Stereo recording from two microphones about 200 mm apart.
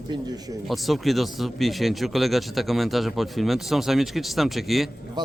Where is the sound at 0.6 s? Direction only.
Centre (ahead or behind).